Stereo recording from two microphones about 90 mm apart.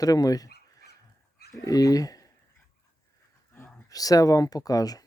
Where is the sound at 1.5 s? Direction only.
40° left (ahead or behind).